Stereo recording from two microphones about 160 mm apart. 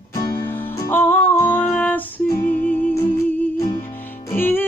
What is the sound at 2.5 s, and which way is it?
Music, 55° left (ahead or behind).